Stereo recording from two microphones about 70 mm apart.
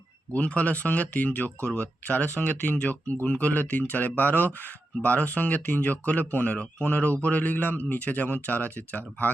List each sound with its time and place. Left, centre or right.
0.3 s speech: centre